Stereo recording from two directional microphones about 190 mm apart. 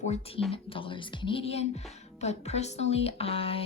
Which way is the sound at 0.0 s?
35° left (ahead or behind).